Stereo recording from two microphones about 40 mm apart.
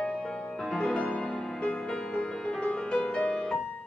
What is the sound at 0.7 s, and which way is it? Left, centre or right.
Music, centre.